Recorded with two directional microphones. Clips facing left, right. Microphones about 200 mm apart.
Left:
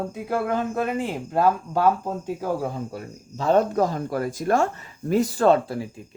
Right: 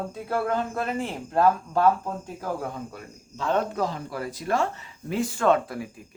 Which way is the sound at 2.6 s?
35° left (ahead or behind).